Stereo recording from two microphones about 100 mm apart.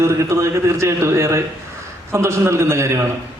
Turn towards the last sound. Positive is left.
turn(degrees=-30)  # may be behind; listen again after turning